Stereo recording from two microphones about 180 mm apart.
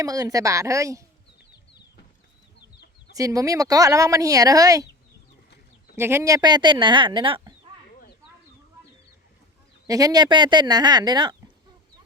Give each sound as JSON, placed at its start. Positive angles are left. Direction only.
{"t": 0.0, "sound": "a woman's voice", "side_deg": -20}
{"t": 3.2, "sound": "speech", "side_deg": -20}
{"t": 6.0, "sound": "speech", "side_deg": -15}
{"t": 9.8, "sound": "speech", "side_deg": -20}